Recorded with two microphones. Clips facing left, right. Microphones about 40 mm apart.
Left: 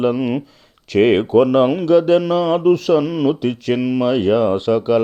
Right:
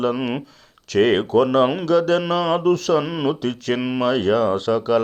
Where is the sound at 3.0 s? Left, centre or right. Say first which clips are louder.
Left 5 dB; centre.